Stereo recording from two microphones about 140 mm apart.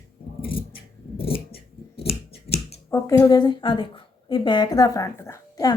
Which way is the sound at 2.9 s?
25° left (ahead or behind).